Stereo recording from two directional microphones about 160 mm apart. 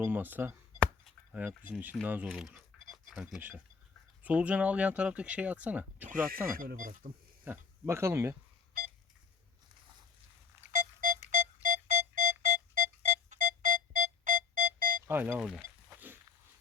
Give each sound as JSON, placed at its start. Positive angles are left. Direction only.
{"t": 0.0, "sound": "speech", "side_deg": -10}
{"t": 6.5, "sound": "speech", "side_deg": -60}
{"t": 7.4, "sound": "speech", "side_deg": -15}
{"t": 10.7, "sound": "music", "side_deg": -55}
{"t": 15.0, "sound": "speech", "side_deg": -15}
{"t": 15.4, "sound": "a sound", "side_deg": 0}